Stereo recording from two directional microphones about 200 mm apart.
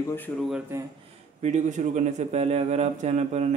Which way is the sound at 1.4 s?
35° right (ahead or behind).